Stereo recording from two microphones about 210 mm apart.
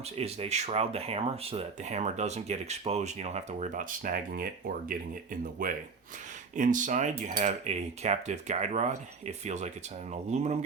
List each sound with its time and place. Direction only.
0.2 s speech: 30° right (ahead or behind)
5.6 s speech: 40° right (ahead or behind)